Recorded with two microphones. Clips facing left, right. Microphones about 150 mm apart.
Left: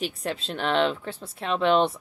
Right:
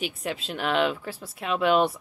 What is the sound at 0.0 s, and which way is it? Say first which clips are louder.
Speech: left 1 dB; 5° right (ahead or behind).